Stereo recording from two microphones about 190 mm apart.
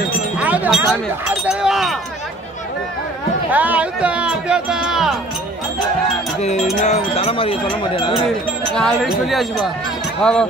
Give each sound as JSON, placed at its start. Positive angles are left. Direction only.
{"t": 0.4, "sound": "a sound", "side_deg": -5}
{"t": 1.2, "sound": "speech", "side_deg": -5}
{"t": 3.5, "sound": "speech", "side_deg": -10}
{"t": 6.4, "sound": "speech", "side_deg": 35}
{"t": 8.7, "sound": "speech", "side_deg": 0}